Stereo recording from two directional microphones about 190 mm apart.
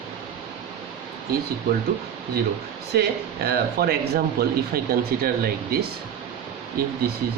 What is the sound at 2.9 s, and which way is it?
Speech, 55° right (ahead or behind).